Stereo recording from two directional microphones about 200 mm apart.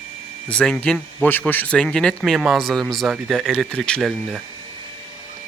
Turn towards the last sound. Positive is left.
turn(degrees=0)  # may be behind; listen again after turning